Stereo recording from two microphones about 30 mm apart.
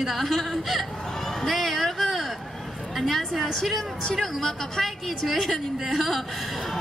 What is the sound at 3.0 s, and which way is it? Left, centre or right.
A woman's voice, centre.